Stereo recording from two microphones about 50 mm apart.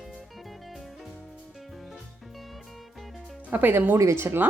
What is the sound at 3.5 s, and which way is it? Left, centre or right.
Speech, right.